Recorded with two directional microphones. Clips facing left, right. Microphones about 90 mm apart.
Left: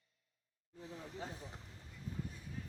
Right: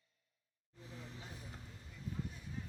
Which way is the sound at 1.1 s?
35° left (ahead or behind).